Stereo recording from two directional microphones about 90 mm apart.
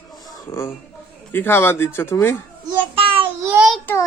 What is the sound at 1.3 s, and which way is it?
Speech, 25° left (ahead or behind).